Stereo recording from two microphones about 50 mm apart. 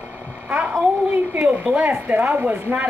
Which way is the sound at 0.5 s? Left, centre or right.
Centre.